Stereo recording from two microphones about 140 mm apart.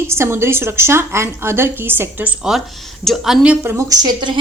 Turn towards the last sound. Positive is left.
turn(degrees=-30)  # may be behind; listen again after turning